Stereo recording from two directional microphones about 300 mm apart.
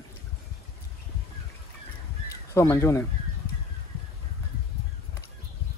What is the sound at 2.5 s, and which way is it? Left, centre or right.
Speech, centre.